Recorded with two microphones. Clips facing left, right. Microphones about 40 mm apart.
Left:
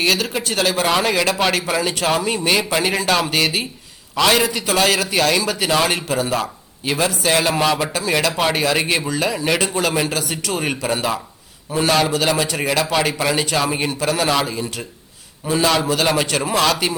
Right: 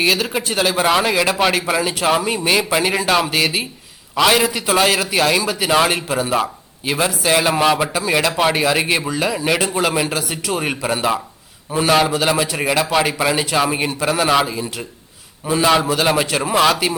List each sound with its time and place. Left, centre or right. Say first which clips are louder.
0.0 s a man's voice: right 1 dB; centre